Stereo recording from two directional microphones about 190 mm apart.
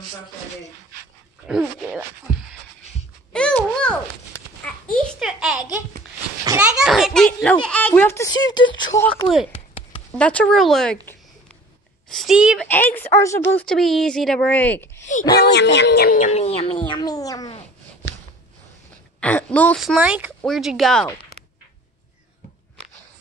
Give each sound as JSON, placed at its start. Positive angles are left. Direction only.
{"t": 1.5, "sound": "speech", "side_deg": -5}
{"t": 3.3, "sound": "a sound", "side_deg": 5}
{"t": 6.4, "sound": "a sound", "side_deg": -15}
{"t": 6.7, "sound": "a child's voice", "side_deg": 0}
{"t": 10.1, "sound": "speech", "side_deg": 5}
{"t": 12.6, "sound": "speech", "side_deg": 10}
{"t": 15.3, "sound": "speech", "side_deg": 60}
{"t": 19.1, "sound": "a woman's voice", "side_deg": 5}
{"t": 20.0, "sound": "speech", "side_deg": -10}